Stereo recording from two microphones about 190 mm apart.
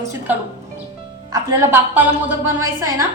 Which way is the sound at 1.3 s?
10° right (ahead or behind).